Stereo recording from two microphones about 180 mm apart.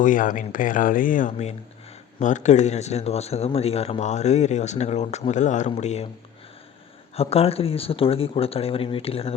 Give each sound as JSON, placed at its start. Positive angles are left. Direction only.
{"t": 0.0, "sound": "speech", "side_deg": 45}
{"t": 7.2, "sound": "speech", "side_deg": 35}